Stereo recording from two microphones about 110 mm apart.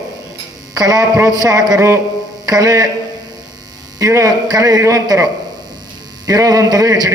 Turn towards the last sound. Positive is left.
turn(degrees=-35)  # may be behind; listen again after turning